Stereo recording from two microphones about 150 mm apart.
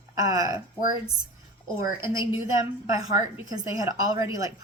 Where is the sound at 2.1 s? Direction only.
20° right (ahead or behind).